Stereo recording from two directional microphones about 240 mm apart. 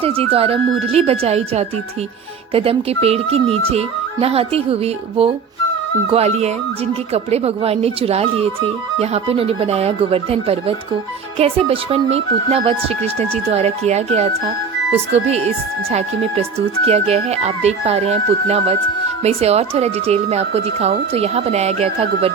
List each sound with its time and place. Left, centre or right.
0.0 s speech: right